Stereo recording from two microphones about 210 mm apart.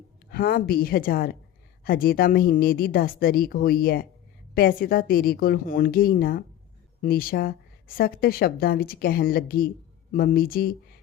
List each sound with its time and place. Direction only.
0.3 s speech: 45° left (ahead or behind)